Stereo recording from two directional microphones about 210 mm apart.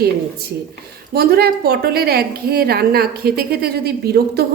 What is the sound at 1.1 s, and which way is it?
A woman's voice, 45° right (ahead or behind).